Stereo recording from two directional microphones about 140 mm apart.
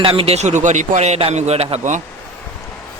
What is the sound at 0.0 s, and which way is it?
A man's voice, 40° right (ahead or behind).